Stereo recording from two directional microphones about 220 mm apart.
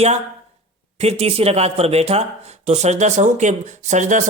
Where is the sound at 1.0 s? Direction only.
30° right (ahead or behind).